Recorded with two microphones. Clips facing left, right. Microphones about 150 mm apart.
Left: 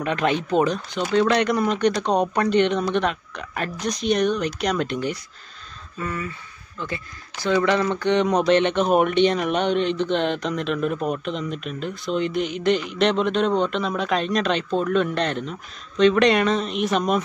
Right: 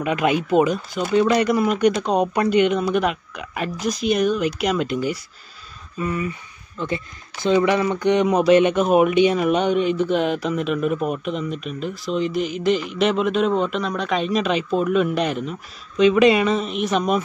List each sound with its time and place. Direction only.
0.0 s speech: 10° right (ahead or behind)